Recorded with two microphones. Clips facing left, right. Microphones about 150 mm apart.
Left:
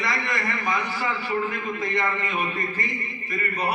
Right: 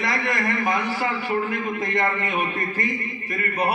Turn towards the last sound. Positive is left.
turn(degrees=-50)  # may be behind; listen again after turning